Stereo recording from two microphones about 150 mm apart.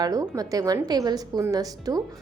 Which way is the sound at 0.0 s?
25° right (ahead or behind).